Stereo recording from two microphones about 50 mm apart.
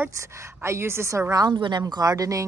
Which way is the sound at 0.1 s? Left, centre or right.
Right.